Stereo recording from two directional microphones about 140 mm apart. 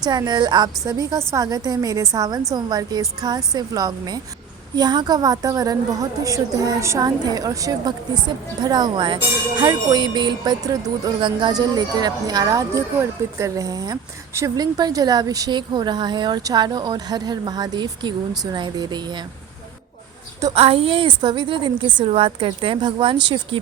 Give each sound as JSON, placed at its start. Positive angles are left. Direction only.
{"t": 0.0, "sound": "a woman's voice", "side_deg": -30}
{"t": 20.6, "sound": "a woman's voice", "side_deg": -40}